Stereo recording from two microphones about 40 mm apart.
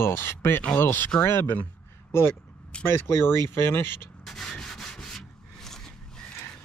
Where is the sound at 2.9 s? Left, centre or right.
Left.